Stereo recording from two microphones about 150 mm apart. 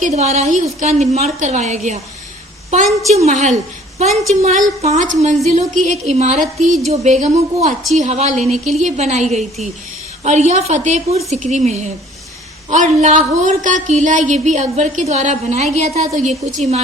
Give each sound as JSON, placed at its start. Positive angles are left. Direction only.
{"t": 0.0, "sound": "speech", "side_deg": -45}
{"t": 3.2, "sound": "a woman's voice", "side_deg": -50}